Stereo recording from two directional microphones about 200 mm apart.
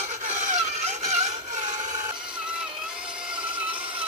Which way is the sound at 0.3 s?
35° right (ahead or behind).